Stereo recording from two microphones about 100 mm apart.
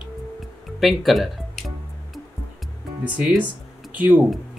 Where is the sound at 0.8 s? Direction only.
Centre (ahead or behind).